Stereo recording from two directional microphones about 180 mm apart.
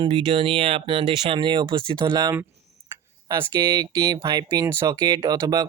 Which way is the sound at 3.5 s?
25° right (ahead or behind).